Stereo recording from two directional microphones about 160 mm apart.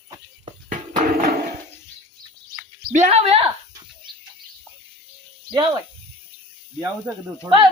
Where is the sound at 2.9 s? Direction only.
45° right (ahead or behind).